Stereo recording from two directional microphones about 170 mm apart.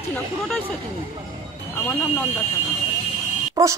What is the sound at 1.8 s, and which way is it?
Speech, 15° left (ahead or behind).